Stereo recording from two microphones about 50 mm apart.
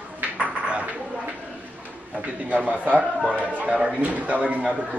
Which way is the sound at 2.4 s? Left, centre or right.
Right.